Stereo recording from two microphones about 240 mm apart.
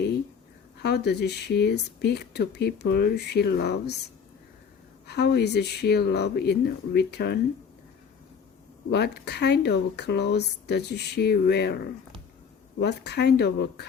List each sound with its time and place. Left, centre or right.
0.8 s speech: left
5.0 s speech: left
8.9 s speech: left
12.8 s speech: left